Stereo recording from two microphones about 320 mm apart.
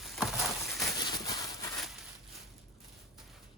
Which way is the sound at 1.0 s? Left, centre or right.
Centre.